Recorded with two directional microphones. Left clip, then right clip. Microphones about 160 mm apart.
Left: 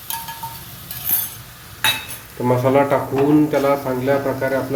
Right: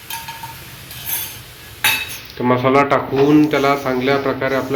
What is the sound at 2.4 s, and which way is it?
Speech, 15° left (ahead or behind).